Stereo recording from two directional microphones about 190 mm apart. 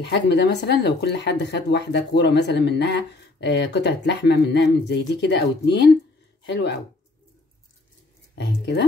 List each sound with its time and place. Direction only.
0.0 s speech: 60° left (ahead or behind)
8.4 s speech: 65° left (ahead or behind)